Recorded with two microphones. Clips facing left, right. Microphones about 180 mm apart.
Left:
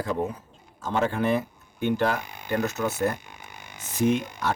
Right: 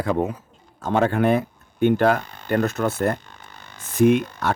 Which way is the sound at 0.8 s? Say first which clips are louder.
Right 5 dB; 60° right (ahead or behind).